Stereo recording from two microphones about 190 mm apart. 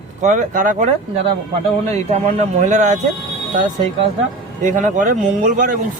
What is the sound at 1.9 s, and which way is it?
Speech, 35° right (ahead or behind).